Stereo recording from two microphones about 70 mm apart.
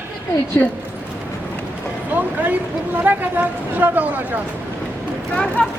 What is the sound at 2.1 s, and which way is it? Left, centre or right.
Speech, right.